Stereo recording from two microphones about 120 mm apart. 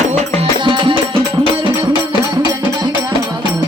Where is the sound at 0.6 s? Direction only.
45° right (ahead or behind).